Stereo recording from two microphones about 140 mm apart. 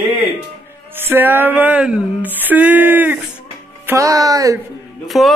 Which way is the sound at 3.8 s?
20° right (ahead or behind).